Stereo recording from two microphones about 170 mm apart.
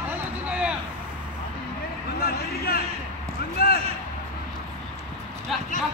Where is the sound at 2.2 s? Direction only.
60° left (ahead or behind).